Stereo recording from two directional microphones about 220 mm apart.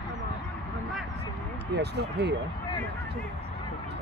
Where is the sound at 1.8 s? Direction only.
50° right (ahead or behind).